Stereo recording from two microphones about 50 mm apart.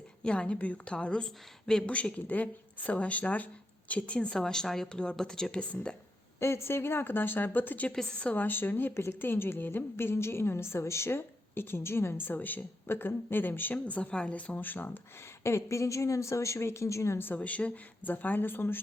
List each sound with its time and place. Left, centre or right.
0.3 s speech: left
1.9 s speech: left
6.4 s a woman's voice: left
12.3 s speech: left
13.7 s speech: left
15.4 s a woman's voice: left
17.2 s a woman's voice: left
17.4 s speech: left